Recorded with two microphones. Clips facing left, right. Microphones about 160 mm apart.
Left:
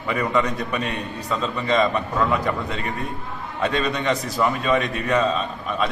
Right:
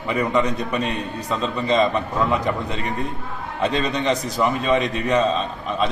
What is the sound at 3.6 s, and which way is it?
A man's voice, 20° right (ahead or behind).